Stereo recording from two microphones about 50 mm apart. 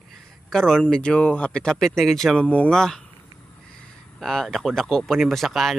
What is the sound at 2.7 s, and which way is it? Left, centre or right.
Speech, centre.